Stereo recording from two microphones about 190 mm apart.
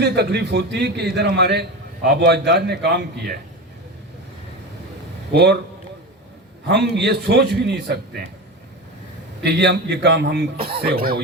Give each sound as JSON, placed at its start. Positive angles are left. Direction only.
{"t": 0.0, "sound": "a man's voice", "side_deg": -60}
{"t": 5.3, "sound": "a man's voice", "side_deg": -60}
{"t": 6.7, "sound": "a man's voice", "side_deg": -60}
{"t": 9.4, "sound": "a man's voice", "side_deg": -60}